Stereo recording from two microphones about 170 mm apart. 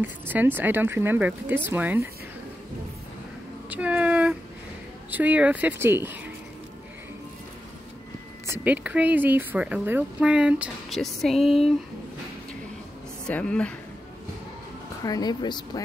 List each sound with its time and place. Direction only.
0.0 s speech: 10° right (ahead or behind)
3.7 s speech: 10° right (ahead or behind)
8.5 s speech: 10° right (ahead or behind)
13.3 s speech: 5° left (ahead or behind)
15.0 s speech: 25° left (ahead or behind)